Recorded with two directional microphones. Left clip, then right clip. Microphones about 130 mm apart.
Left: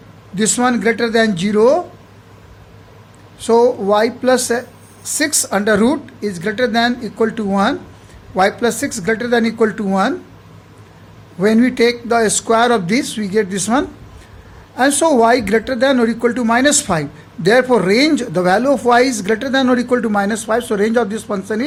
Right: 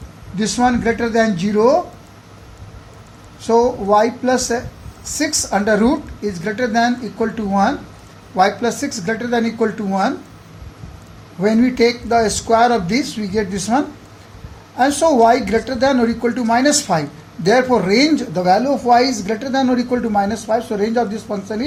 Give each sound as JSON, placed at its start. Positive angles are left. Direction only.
{"t": 0.3, "sound": "speech", "side_deg": 90}
{"t": 3.4, "sound": "a woman's voice", "side_deg": 70}
{"t": 11.3, "sound": "a woman's voice", "side_deg": 60}